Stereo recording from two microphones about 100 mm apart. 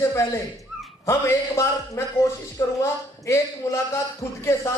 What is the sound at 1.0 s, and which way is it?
A man's voice, 30° left (ahead or behind).